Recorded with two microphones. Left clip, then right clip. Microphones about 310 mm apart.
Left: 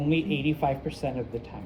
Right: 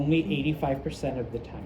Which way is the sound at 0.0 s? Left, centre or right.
Centre.